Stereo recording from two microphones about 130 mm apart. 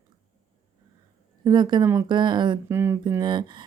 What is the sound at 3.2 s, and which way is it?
Speech, 35° right (ahead or behind).